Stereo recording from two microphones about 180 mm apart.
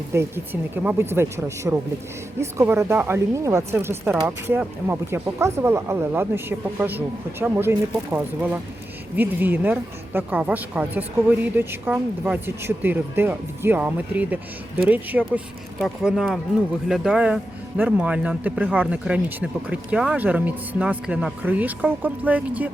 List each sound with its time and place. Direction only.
0.1 s speech: 15° right (ahead or behind)